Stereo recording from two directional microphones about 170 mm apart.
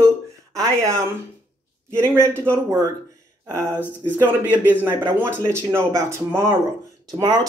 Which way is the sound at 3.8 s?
10° left (ahead or behind).